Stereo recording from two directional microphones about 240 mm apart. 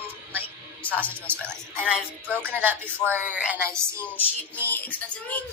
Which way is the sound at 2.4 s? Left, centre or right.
Centre.